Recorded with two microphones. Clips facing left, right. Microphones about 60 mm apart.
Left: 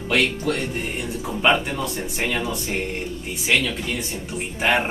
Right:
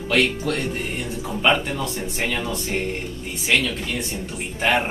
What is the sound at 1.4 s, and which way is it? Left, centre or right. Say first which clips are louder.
Speech: left 1 dB; centre.